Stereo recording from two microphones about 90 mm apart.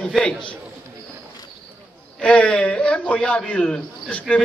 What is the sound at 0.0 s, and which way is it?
Speech, 10° left (ahead or behind).